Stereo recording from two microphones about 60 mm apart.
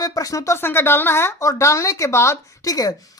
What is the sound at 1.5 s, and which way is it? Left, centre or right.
Speech, left.